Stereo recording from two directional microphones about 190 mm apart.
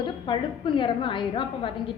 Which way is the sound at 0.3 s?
25° left (ahead or behind).